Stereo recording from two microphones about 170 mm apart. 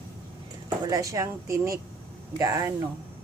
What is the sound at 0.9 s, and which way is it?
Speech, 20° right (ahead or behind).